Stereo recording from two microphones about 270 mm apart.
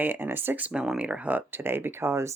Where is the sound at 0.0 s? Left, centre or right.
Centre.